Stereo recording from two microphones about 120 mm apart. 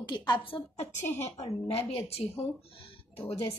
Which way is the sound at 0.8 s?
60° left (ahead or behind).